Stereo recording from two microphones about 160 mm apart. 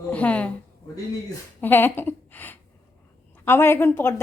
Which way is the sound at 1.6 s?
10° left (ahead or behind).